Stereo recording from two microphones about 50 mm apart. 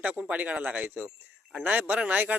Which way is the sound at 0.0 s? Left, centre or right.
Right.